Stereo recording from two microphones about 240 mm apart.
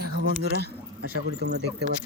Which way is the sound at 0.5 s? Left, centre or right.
Right.